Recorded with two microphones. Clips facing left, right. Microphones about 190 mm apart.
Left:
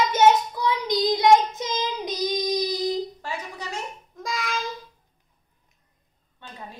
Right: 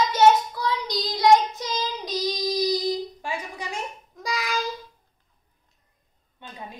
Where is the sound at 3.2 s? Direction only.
10° right (ahead or behind).